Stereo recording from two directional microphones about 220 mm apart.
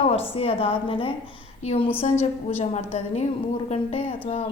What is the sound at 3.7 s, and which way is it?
Speech, 25° left (ahead or behind).